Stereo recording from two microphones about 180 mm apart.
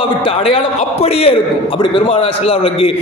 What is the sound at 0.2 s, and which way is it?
A man's voice, 30° left (ahead or behind).